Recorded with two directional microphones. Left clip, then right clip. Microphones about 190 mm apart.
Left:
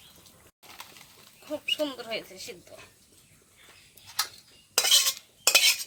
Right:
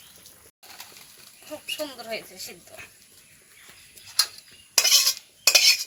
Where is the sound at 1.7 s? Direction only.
45° left (ahead or behind).